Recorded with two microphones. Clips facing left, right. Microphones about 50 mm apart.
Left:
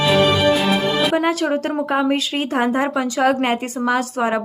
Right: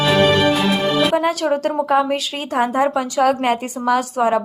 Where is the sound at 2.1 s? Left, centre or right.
Left.